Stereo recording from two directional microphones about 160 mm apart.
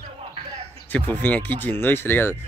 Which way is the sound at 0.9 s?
10° left (ahead or behind).